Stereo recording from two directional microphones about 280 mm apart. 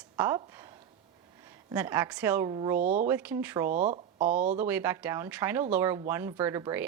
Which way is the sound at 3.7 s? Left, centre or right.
Right.